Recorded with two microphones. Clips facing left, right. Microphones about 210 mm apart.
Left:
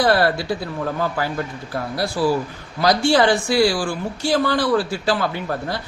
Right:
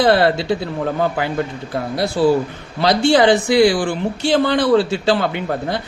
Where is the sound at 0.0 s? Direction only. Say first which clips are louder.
Right 3 dB; 25° right (ahead or behind).